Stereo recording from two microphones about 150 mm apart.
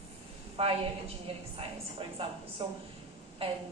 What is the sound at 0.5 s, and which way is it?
Speech, 40° right (ahead or behind).